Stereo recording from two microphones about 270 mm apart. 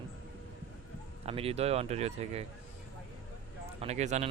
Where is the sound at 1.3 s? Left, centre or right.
Right.